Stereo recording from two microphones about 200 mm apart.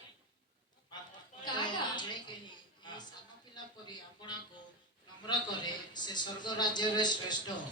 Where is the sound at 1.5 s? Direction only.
20° left (ahead or behind).